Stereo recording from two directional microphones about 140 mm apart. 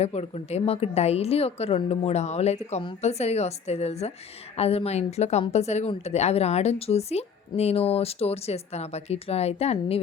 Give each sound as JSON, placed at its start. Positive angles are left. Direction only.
{"t": 0.0, "sound": "speech", "side_deg": 50}